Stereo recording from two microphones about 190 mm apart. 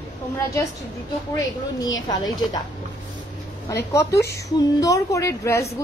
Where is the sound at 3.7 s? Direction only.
15° left (ahead or behind).